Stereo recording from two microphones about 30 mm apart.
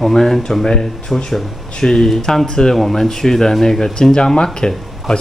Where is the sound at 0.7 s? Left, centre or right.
Left.